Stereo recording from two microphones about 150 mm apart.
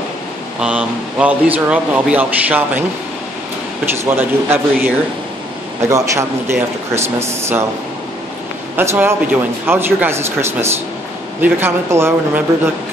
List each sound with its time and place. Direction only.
0.6 s speech: 5° right (ahead or behind)
4.0 s speech: 15° right (ahead or behind)
8.7 s speech: 15° right (ahead or behind)